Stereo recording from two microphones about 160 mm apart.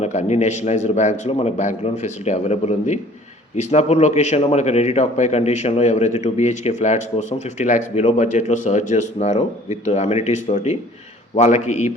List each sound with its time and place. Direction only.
0.0 s speech: 45° left (ahead or behind)